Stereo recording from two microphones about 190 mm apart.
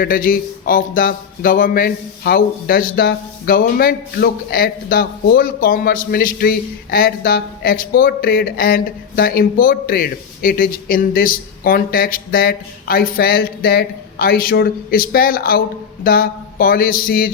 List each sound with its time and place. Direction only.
0.0 s speech: 45° left (ahead or behind)